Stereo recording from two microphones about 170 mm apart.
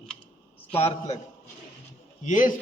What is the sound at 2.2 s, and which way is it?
Speech, 50° left (ahead or behind).